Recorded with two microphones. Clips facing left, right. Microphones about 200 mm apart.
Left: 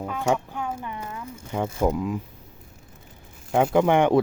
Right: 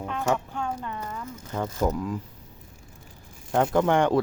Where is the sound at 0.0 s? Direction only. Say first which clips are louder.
Left 2 dB; 5° left (ahead or behind).